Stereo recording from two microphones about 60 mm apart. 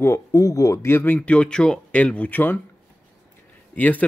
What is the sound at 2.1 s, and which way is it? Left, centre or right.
Speech, left.